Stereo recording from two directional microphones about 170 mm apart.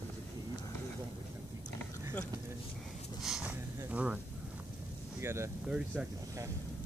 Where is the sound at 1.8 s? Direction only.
10° left (ahead or behind).